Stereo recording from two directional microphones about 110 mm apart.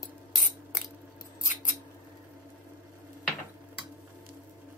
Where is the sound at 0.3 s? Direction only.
5° right (ahead or behind).